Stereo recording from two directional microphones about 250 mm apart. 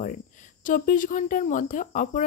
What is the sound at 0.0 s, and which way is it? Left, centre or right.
Speech, left.